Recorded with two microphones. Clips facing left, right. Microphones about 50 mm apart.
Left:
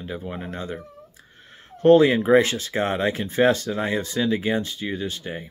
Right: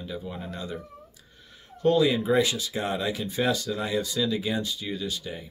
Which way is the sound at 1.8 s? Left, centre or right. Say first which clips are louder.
Left 7 dB; left.